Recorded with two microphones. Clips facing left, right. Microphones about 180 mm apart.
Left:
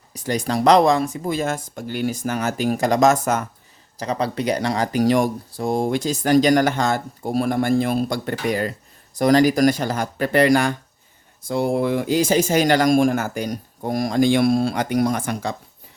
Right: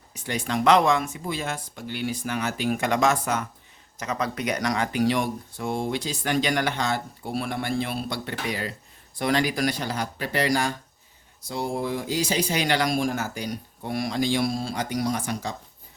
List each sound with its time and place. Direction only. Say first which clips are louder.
0.1 s speech: left 5 dB; 40° left (ahead or behind)
3.9 s speech: left 5 dB; 35° left (ahead or behind); by 15.5 s 60° left (ahead or behind)